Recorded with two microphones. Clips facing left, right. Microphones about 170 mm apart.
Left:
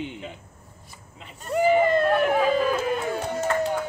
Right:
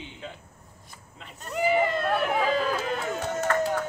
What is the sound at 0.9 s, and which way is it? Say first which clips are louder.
Speech: left 1 dB; 5° left (ahead or behind).